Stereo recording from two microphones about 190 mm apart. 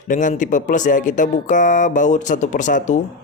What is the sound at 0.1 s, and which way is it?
Speech, 40° left (ahead or behind).